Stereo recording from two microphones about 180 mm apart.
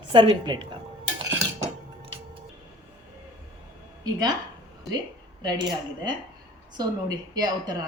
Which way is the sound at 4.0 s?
20° right (ahead or behind).